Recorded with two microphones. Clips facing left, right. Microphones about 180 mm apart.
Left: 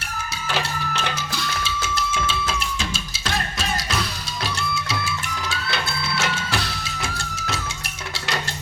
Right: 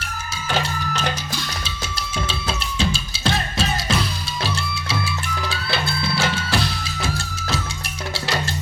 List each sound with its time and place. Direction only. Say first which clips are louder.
1.6 s music: left 5 dB; 35° right (ahead or behind)